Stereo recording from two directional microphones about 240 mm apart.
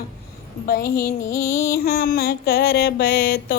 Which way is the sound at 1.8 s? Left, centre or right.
Left.